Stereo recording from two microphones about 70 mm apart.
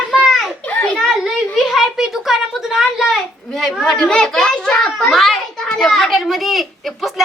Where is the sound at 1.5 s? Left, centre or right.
Centre.